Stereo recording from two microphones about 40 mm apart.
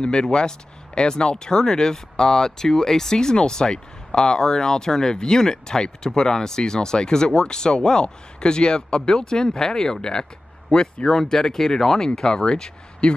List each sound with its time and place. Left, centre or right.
0.0 s speech: left